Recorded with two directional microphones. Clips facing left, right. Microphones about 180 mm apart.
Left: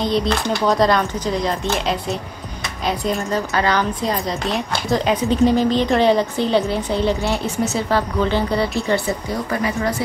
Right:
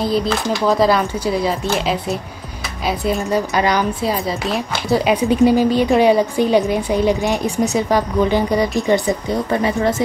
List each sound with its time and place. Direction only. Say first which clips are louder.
0.0 s speech: right 1 dB; 5° right (ahead or behind)
3.3 s speech: right 3 dB; 15° right (ahead or behind)